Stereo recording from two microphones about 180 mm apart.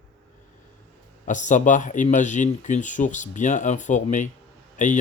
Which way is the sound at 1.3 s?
45° left (ahead or behind).